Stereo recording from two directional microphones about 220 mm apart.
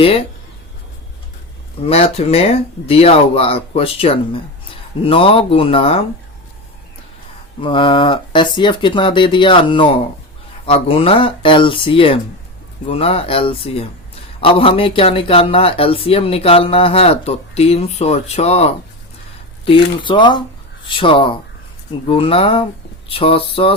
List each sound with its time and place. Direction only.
0.0 s speech: 25° left (ahead or behind)
1.8 s speech: 25° left (ahead or behind)
7.6 s speech: 25° left (ahead or behind)